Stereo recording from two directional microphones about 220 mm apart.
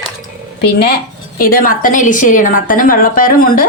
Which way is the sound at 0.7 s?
45° left (ahead or behind).